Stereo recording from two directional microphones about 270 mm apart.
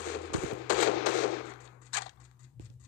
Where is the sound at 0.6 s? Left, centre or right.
Left.